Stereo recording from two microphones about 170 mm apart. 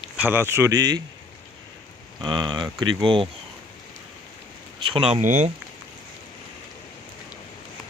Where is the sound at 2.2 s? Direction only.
25° right (ahead or behind).